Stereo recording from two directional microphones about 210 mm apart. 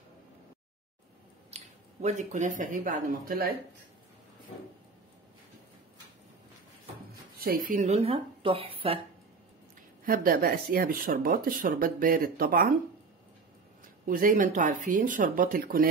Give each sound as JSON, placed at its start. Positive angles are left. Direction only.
{"t": 1.5, "sound": "speech", "side_deg": -35}
{"t": 7.3, "sound": "speech", "side_deg": -40}
{"t": 10.0, "sound": "speech", "side_deg": -45}
{"t": 14.0, "sound": "speech", "side_deg": -40}